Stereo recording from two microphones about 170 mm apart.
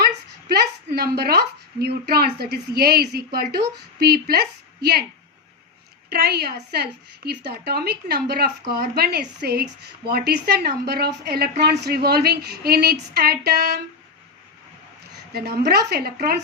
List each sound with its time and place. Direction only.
0.0 s a woman's voice: 70° right (ahead or behind)
6.1 s a woman's voice: 70° right (ahead or behind)
15.3 s a woman's voice: 70° right (ahead or behind)